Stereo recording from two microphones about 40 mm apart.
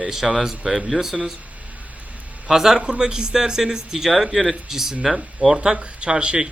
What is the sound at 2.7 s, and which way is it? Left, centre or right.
Speech, right.